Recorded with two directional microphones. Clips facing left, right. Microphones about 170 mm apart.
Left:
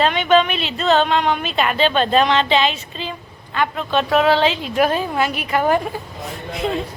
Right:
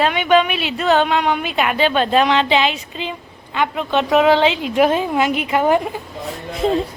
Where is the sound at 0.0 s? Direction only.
10° right (ahead or behind).